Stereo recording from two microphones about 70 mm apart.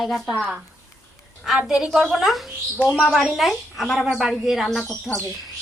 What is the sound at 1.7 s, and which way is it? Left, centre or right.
A woman's voice, centre.